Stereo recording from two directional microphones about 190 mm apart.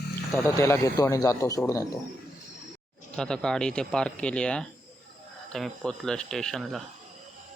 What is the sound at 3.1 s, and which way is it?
Speech, 5° left (ahead or behind).